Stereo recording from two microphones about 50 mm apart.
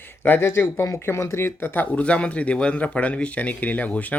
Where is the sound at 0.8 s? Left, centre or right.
Left.